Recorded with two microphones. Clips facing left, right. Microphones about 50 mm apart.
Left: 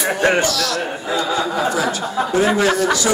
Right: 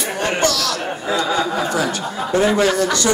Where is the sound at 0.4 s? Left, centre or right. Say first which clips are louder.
Even; centre.